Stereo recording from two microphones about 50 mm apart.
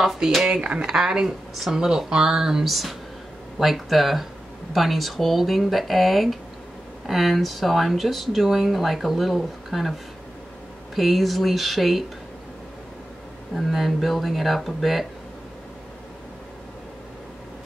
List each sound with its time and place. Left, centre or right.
0.0 s speech: centre
11.0 s speech: centre
13.6 s speech: centre